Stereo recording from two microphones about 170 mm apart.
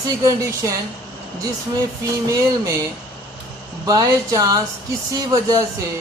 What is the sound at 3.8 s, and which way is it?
Speech, 20° right (ahead or behind).